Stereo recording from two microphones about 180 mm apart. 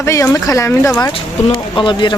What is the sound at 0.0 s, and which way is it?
Speech, 15° left (ahead or behind).